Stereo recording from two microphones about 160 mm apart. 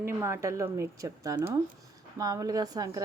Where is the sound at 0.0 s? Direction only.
15° right (ahead or behind).